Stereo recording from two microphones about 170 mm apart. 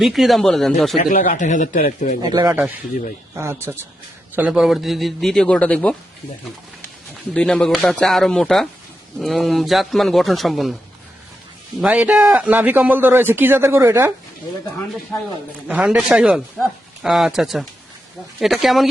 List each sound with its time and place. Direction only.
0.0 s speech: centre (ahead or behind)
1.0 s a man's voice: 50° left (ahead or behind)
2.3 s a man's voice: 25° right (ahead or behind)
3.3 s a man's voice: 15° right (ahead or behind); by 6.0 s 5° left (ahead or behind)
7.3 s speech: 5° left (ahead or behind)
11.8 s a man's voice: 5° right (ahead or behind)
15.1 s speech: 15° left (ahead or behind)
15.6 s speech: 10° right (ahead or behind)